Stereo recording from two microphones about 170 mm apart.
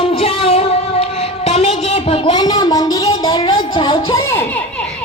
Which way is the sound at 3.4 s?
35° left (ahead or behind).